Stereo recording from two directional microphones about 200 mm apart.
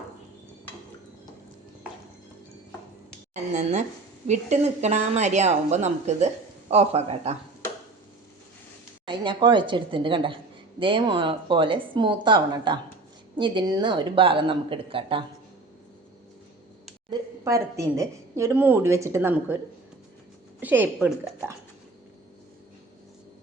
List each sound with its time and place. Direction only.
3.5 s speech: 35° right (ahead or behind)
9.0 s a woman's voice: 25° right (ahead or behind)
17.1 s a woman's voice: 15° right (ahead or behind)
20.6 s a woman's voice: 10° right (ahead or behind)